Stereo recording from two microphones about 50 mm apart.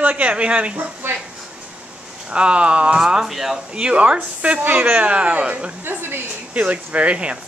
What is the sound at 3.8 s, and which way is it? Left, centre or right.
A woman's voice, right.